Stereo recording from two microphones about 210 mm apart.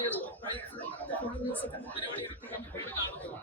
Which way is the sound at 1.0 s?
10° left (ahead or behind).